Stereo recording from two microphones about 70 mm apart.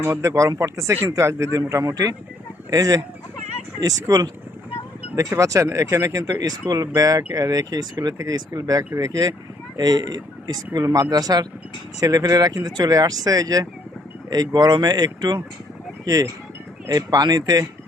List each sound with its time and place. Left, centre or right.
0.0 s speech: right
5.1 s speech: right
6.4 s speech: right
9.7 s speech: right
10.8 s speech: right
14.3 s speech: right
16.0 s speech: right